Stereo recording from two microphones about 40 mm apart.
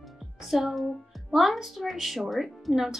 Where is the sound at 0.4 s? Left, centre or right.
Centre.